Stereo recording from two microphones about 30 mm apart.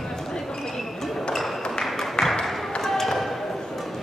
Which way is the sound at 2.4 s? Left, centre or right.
Centre.